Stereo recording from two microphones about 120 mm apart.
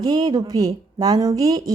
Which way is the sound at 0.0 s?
35° right (ahead or behind).